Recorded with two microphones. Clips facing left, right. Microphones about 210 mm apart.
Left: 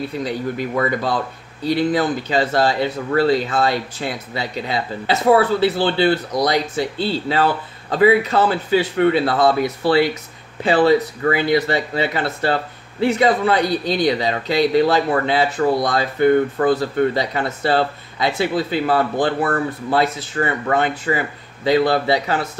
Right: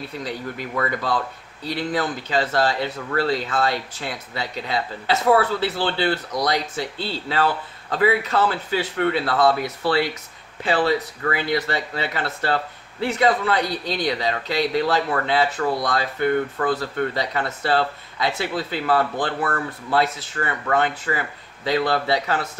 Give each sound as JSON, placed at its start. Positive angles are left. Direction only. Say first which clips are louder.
{"t": 0.2, "sound": "speech", "louder": "left 6 dB", "side_deg": 15}